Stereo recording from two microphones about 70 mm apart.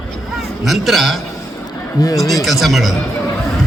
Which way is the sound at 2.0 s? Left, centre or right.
Left.